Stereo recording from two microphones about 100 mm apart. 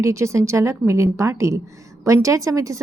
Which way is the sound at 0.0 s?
30° right (ahead or behind).